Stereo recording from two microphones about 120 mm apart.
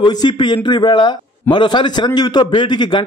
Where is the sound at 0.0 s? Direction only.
35° left (ahead or behind).